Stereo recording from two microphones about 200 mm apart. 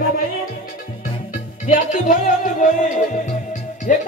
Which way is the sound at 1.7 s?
40° left (ahead or behind).